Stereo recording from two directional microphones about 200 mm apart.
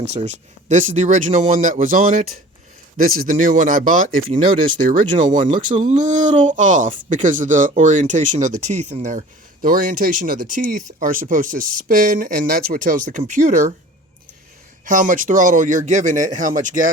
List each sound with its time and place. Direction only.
0.1 s speech: 35° right (ahead or behind)
14.8 s speech: 40° right (ahead or behind)